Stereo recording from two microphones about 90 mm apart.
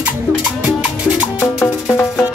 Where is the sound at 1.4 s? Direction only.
30° left (ahead or behind).